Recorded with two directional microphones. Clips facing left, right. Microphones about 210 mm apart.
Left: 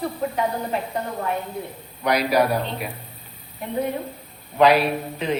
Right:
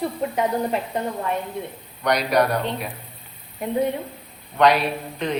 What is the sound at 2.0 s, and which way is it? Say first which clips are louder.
Speech: even; 5° left (ahead or behind).